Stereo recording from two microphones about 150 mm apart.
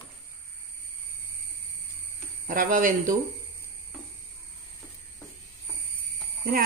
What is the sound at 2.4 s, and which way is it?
Speech, 65° right (ahead or behind).